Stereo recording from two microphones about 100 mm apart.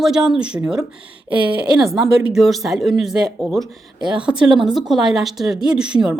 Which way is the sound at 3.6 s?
50° right (ahead or behind).